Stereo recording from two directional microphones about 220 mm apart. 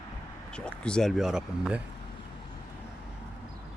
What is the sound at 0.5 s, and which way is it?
Speech, 5° left (ahead or behind).